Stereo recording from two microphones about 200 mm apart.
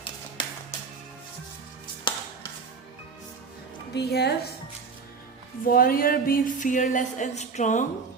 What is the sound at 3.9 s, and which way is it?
Speech, 55° left (ahead or behind).